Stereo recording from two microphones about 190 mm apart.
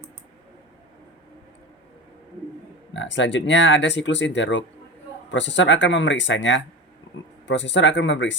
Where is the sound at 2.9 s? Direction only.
75° left (ahead or behind).